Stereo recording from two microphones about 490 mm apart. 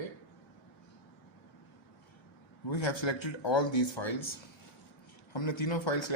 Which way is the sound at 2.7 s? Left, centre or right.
Left.